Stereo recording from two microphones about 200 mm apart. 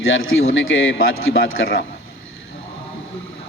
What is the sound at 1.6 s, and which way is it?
Speech, 55° left (ahead or behind).